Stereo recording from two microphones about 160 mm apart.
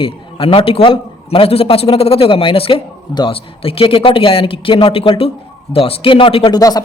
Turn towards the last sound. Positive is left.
turn(degrees=35)  # may be behind; listen again after turning